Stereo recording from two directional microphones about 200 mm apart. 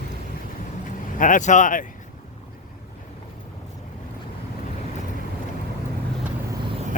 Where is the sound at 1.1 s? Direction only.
40° left (ahead or behind).